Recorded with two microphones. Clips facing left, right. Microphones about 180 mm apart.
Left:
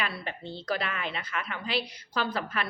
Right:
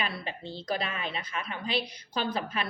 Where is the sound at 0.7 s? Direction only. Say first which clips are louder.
Left 1 dB; 20° right (ahead or behind).